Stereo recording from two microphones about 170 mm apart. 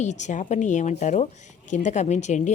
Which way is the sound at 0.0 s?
45° left (ahead or behind).